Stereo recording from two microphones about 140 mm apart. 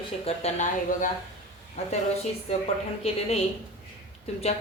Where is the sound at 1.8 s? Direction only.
50° left (ahead or behind).